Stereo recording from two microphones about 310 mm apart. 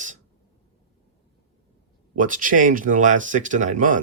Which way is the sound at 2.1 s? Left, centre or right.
Right.